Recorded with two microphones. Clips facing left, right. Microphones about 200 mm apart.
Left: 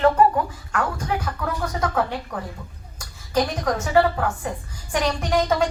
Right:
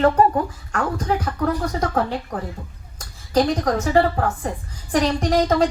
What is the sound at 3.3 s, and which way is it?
A woman's voice, 35° right (ahead or behind).